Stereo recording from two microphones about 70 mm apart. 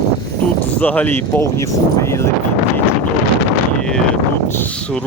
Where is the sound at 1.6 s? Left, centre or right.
Left.